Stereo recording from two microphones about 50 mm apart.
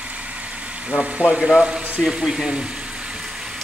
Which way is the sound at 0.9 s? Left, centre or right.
Right.